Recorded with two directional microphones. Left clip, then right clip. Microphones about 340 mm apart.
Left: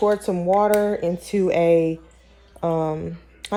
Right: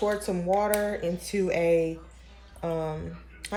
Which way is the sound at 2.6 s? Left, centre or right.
Centre.